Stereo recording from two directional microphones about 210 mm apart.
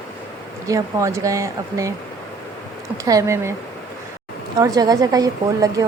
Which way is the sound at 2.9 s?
15° right (ahead or behind).